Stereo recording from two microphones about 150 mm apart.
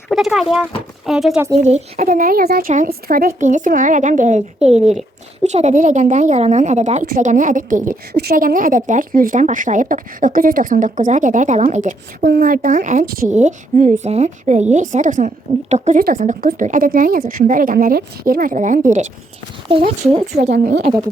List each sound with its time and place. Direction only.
0.1 s speech: centre (ahead or behind)
1.6 s a woman's voice: 50° right (ahead or behind)
20.1 s a woman's voice: 45° right (ahead or behind)